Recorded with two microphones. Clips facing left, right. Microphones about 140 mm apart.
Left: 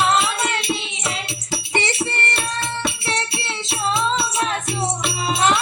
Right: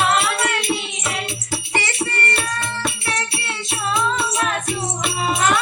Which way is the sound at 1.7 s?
25° left (ahead or behind).